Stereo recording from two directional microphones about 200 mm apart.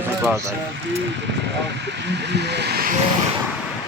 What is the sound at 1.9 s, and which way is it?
Speech, 60° right (ahead or behind).